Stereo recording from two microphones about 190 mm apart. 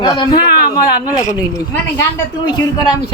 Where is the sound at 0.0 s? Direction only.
25° left (ahead or behind).